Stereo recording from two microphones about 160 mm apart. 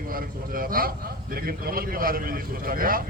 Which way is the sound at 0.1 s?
65° right (ahead or behind).